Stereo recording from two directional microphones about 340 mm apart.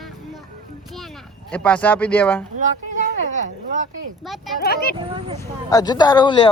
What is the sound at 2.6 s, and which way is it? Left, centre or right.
Speech, right.